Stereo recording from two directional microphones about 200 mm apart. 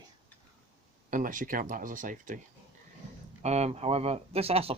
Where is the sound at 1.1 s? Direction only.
40° right (ahead or behind).